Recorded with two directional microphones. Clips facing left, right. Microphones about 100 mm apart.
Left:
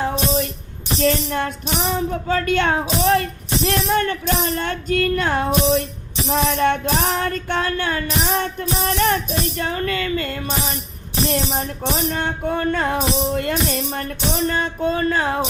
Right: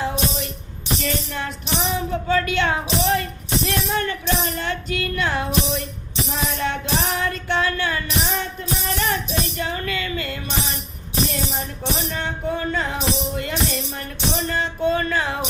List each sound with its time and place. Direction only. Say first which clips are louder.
0.0 s music: left 4 dB; 50° left (ahead or behind)
6.2 s music: left 8 dB; 60° left (ahead or behind)
9.6 s music: left 3 dB; 45° left (ahead or behind)
12.2 s music: left 3 dB; 60° left (ahead or behind); by 15.4 s 40° left (ahead or behind)